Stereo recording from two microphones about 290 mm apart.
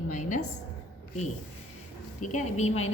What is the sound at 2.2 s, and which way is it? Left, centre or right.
Speech, left.